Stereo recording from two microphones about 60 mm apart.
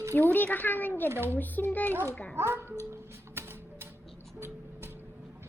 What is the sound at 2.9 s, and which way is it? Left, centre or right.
Music, right.